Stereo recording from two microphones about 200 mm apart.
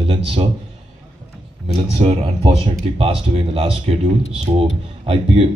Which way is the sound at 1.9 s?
30° right (ahead or behind).